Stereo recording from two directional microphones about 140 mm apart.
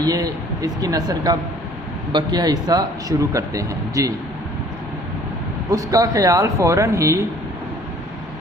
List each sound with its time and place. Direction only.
0.0 s speech: 25° right (ahead or behind)
5.7 s speech: 25° right (ahead or behind)